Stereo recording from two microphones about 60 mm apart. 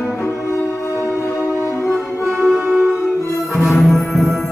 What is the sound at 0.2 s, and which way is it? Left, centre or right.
Music, left.